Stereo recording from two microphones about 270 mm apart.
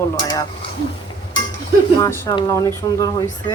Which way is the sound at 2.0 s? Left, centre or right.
Centre.